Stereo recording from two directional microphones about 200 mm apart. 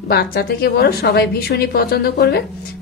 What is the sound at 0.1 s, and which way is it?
A woman's voice, 55° left (ahead or behind).